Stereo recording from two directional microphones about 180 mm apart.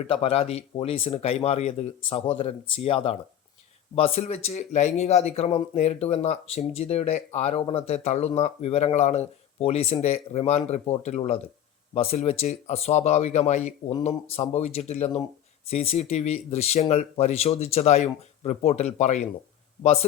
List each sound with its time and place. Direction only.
0.0 s speech: 35° left (ahead or behind)